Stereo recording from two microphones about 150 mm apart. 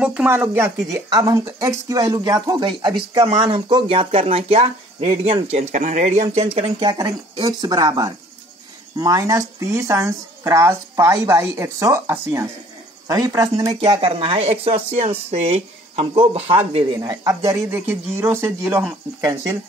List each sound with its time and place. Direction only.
0.0 s speech: 10° right (ahead or behind); by 6.7 s 45° right (ahead or behind)
6.8 s speech: 25° right (ahead or behind)
13.7 s speech: 35° right (ahead or behind)
17.0 s speech: 25° right (ahead or behind); by 18.9 s 10° right (ahead or behind)